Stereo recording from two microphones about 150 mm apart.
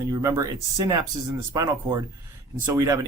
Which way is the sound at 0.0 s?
20° right (ahead or behind).